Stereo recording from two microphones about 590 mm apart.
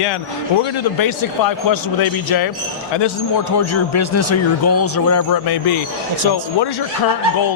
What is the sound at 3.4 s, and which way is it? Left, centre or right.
A man's voice, left.